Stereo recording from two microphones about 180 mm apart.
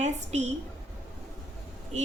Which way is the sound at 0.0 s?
40° right (ahead or behind).